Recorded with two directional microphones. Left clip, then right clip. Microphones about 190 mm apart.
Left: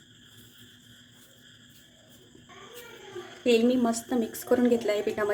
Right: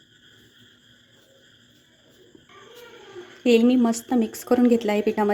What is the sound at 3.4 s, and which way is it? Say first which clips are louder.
A woman's voice: right 5 dB; 45° right (ahead or behind).